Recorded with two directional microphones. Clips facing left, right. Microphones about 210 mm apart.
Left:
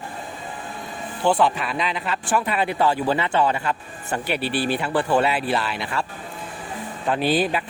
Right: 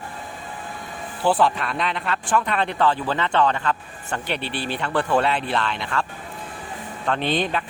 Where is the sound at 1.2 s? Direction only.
Centre (ahead or behind).